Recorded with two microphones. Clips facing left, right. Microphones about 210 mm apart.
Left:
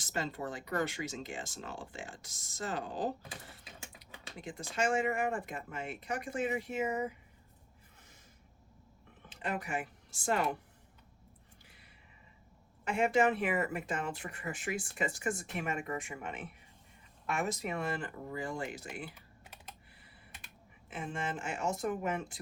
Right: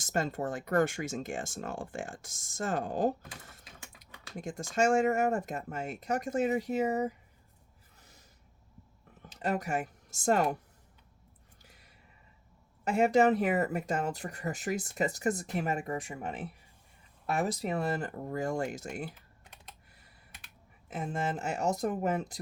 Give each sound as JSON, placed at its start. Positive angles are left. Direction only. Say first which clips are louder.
{"t": 0.0, "sound": "speech", "louder": "right 5 dB", "side_deg": -45}
{"t": 4.4, "sound": "speech", "louder": "right 6 dB", "side_deg": -45}
{"t": 9.3, "sound": "speech", "louder": "right 5 dB", "side_deg": -40}
{"t": 11.6, "sound": "a sound", "louder": "right 1 dB", "side_deg": -40}
{"t": 12.8, "sound": "speech", "louder": "right 4 dB", "side_deg": -40}
{"t": 20.9, "sound": "speech", "louder": "right 4 dB", "side_deg": -40}